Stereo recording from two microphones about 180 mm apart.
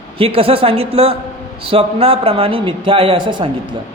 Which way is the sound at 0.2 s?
30° right (ahead or behind).